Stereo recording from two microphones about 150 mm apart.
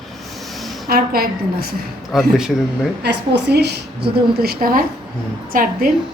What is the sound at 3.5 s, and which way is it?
Speech, 90° right.